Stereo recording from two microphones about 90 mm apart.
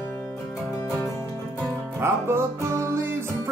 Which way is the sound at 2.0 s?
30° right (ahead or behind).